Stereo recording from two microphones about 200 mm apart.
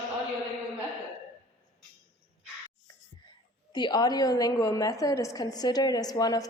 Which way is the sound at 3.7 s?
20° left (ahead or behind).